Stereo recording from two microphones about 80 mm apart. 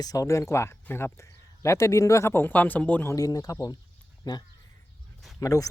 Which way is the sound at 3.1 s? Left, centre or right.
Left.